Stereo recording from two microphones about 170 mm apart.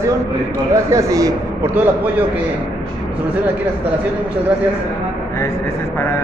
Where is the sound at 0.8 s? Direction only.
20° right (ahead or behind).